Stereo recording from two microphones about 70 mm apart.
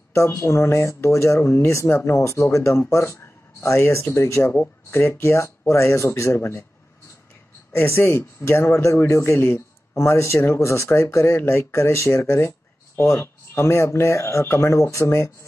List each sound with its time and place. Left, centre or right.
0.1 s speech: left
7.7 s speech: left
14.8 s speech: left